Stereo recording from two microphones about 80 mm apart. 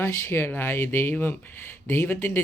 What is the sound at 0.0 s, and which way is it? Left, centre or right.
Speech, left.